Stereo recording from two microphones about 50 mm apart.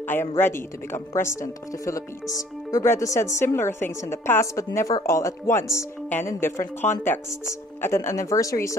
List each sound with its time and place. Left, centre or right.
0.0 s speech: left
6.8 s speech: left
7.2 s speech: left